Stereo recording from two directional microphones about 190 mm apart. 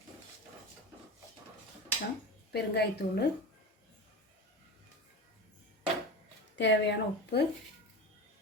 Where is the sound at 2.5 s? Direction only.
60° left (ahead or behind).